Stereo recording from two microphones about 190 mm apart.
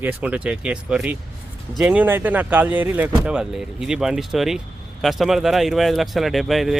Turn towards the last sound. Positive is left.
turn(degrees=0)  # may be behind; listen again after turning